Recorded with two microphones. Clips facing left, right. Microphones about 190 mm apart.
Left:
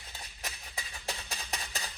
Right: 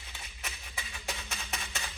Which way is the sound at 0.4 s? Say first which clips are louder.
Even; 35° left (ahead or behind).